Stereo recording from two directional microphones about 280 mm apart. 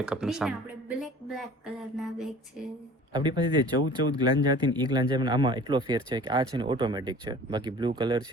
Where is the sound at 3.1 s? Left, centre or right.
Centre.